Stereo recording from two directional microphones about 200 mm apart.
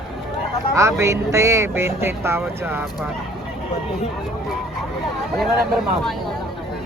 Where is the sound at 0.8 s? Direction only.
15° right (ahead or behind).